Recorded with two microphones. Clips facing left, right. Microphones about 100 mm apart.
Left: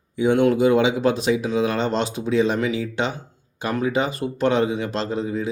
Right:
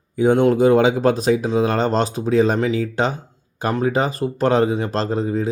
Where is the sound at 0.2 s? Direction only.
35° right (ahead or behind).